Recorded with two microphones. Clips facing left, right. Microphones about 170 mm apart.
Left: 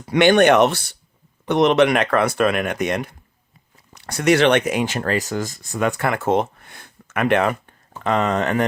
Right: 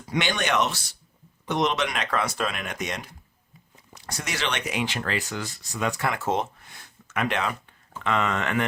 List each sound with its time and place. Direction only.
0.0 s speech: 60° left (ahead or behind)
8.0 s speech: 40° left (ahead or behind)